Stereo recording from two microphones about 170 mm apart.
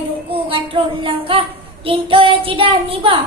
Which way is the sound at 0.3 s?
30° right (ahead or behind).